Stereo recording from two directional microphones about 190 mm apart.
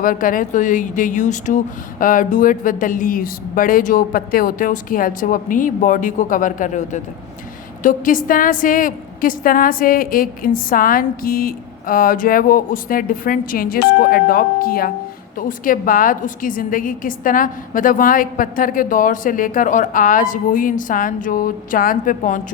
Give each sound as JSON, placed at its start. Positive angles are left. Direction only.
{"t": 0.0, "sound": "a woman's voice", "side_deg": 45}